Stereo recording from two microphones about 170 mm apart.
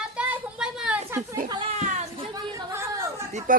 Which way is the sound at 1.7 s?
40° right (ahead or behind).